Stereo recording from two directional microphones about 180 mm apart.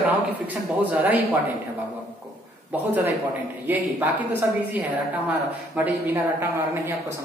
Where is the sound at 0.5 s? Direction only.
10° right (ahead or behind).